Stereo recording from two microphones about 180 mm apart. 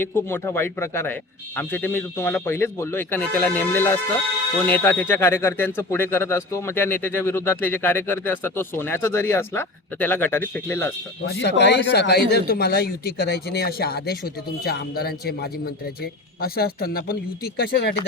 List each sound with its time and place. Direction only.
0.0 s speech: 10° left (ahead or behind)
11.3 s a man's voice: 70° left (ahead or behind)